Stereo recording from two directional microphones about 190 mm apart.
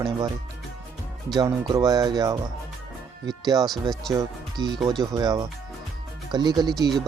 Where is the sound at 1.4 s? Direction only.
20° right (ahead or behind).